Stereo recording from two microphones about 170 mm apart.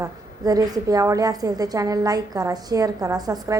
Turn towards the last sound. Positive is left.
turn(degrees=-20)  # may be behind; listen again after turning